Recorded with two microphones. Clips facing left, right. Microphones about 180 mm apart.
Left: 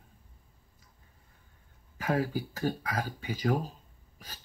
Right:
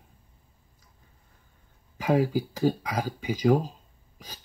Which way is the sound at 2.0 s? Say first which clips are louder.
Right 6 dB; 15° right (ahead or behind).